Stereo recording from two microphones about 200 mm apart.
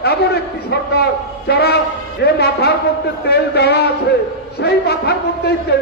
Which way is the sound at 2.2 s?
55° left (ahead or behind).